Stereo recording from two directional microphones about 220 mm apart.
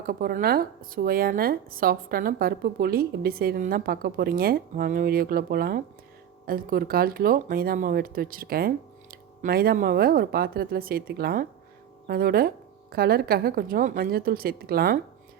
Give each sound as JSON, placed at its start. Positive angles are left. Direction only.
{"t": 0.1, "sound": "speech", "side_deg": -40}